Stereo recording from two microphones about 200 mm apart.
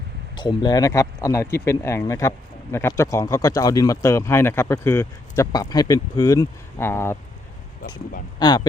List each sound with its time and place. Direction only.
0.3 s speech: 20° left (ahead or behind)
8.4 s speech: 20° left (ahead or behind)